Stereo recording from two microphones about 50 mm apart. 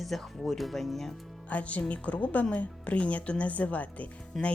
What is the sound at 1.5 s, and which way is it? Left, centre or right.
A woman's voice, left.